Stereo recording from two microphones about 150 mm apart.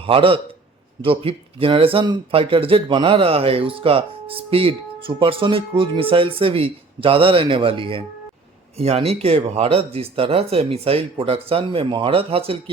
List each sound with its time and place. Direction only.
0.0 s speech: 40° right (ahead or behind)